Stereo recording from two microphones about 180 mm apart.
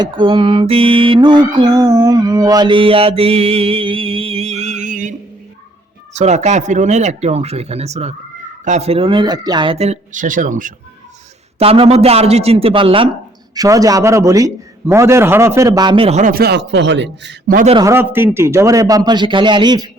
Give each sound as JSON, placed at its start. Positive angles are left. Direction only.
{"t": 0.0, "sound": "music", "side_deg": -30}
{"t": 6.1, "sound": "speech", "side_deg": -40}
{"t": 11.6, "sound": "a man's voice", "side_deg": -35}
{"t": 16.3, "sound": "a man's voice", "side_deg": -65}
{"t": 17.8, "sound": "music", "side_deg": -10}